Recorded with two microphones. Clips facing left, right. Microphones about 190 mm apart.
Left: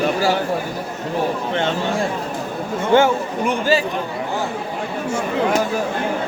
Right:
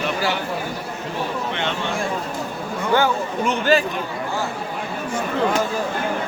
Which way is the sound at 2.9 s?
20° left (ahead or behind).